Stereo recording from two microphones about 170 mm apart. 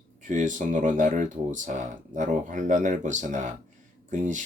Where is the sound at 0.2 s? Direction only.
50° right (ahead or behind).